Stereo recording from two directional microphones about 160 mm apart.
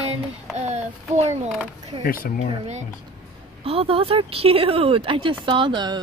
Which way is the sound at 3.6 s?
35° right (ahead or behind).